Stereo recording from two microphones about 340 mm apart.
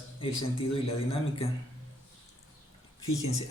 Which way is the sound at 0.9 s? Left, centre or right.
Centre.